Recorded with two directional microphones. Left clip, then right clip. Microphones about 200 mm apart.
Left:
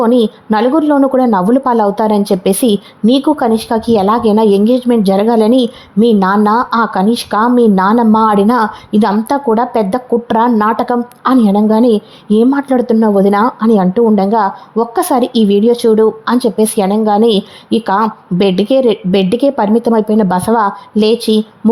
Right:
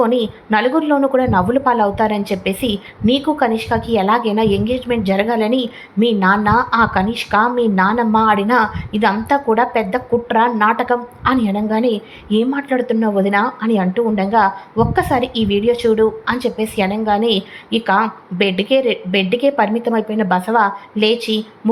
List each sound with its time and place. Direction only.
0.0 s a woman's voice: 50° left (ahead or behind)